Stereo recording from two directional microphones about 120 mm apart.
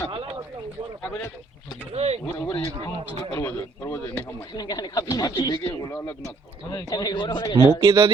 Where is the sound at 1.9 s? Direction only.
60° right (ahead or behind).